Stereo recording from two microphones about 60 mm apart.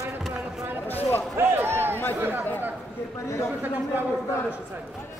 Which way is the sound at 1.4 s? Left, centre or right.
Right.